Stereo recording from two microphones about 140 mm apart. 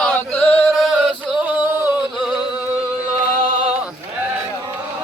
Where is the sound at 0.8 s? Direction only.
Centre (ahead or behind).